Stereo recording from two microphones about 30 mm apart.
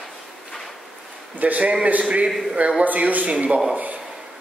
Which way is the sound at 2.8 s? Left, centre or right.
Right.